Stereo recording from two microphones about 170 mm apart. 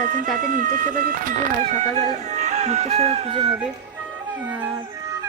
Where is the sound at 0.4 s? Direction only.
50° right (ahead or behind).